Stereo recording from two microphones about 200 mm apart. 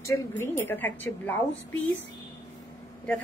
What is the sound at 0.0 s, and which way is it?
A woman's voice, 15° left (ahead or behind).